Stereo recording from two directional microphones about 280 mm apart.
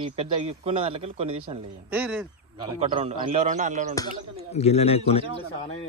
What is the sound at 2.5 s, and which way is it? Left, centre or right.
Speech, centre.